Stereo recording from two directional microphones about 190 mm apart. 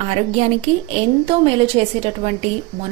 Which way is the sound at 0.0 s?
35° right (ahead or behind).